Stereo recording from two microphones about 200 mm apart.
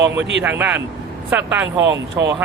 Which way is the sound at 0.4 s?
10° right (ahead or behind).